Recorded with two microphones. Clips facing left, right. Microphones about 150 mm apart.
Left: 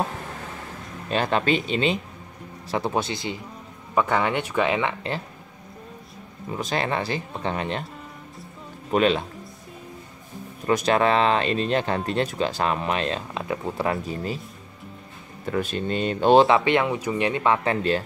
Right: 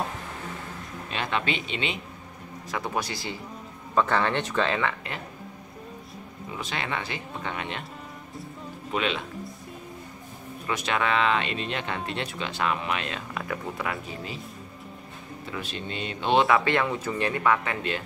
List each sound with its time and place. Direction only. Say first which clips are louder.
1.1 s speech: left 7 dB; 40° left (ahead or behind); by 4.9 s 15° left (ahead or behind)
6.5 s speech: left 6 dB; 40° left (ahead or behind)
8.9 s speech: left 8 dB; 40° left (ahead or behind)
10.7 s speech: left 7 dB; 40° left (ahead or behind)
15.4 s speech: left 10 dB; 50° left (ahead or behind)
16.4 s speech: left 3 dB; 20° left (ahead or behind)